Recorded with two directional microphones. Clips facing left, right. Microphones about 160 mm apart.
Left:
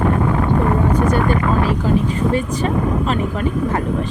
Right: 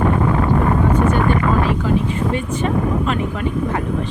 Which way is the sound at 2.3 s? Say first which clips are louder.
Left 1 dB; 35° left (ahead or behind).